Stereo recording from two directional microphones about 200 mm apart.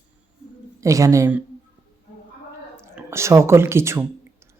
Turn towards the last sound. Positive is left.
turn(degrees=-15)  # may be behind; listen again after turning